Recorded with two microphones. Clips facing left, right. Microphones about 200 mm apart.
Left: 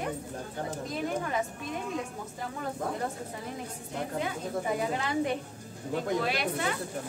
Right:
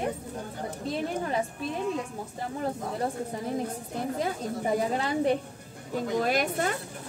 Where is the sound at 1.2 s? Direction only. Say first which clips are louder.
Right 2 dB; 30° right (ahead or behind).